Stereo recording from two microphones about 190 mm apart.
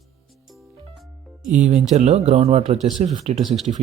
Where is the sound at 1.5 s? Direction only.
40° right (ahead or behind).